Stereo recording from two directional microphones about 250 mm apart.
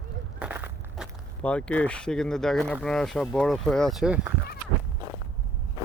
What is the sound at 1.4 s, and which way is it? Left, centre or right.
Speech, centre.